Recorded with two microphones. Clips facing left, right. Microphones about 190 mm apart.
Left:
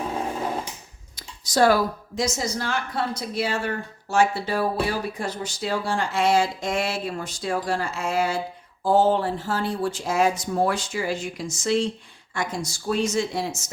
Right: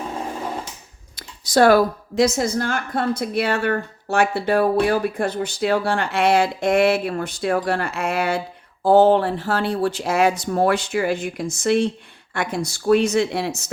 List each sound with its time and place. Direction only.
1.1 s speech: 60° right (ahead or behind)